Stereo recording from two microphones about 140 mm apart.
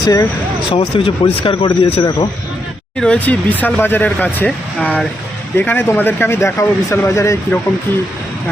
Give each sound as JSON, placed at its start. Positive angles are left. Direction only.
{"t": 0.0, "sound": "speech", "side_deg": 25}
{"t": 0.7, "sound": "speech", "side_deg": 40}
{"t": 3.0, "sound": "speech", "side_deg": 10}